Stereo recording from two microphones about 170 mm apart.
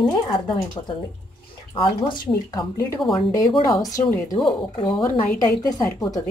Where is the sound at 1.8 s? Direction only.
25° left (ahead or behind).